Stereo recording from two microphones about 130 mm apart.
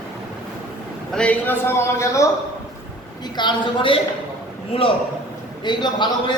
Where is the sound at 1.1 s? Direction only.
10° left (ahead or behind).